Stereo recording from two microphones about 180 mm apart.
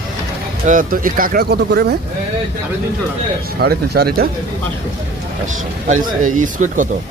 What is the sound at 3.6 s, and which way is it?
Speech, 65° right (ahead or behind).